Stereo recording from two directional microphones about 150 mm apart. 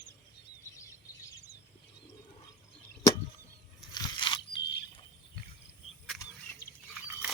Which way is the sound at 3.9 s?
30° left (ahead or behind).